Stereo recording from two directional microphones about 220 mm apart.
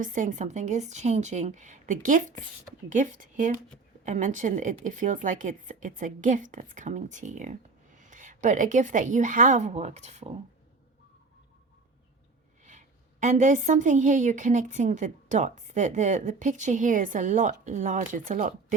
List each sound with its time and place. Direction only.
0.0 s a woman's voice: 35° right (ahead or behind)
12.6 s a woman's voice: 35° right (ahead or behind)